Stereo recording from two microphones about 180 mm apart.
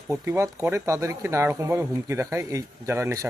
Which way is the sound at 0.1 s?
15° right (ahead or behind).